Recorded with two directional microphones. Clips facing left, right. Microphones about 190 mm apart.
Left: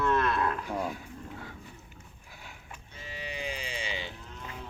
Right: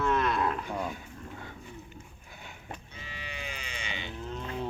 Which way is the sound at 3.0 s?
40° left (ahead or behind).